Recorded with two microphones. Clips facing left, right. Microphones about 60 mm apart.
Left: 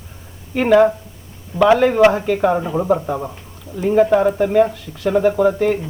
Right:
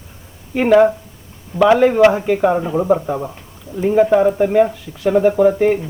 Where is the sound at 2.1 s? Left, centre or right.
Centre.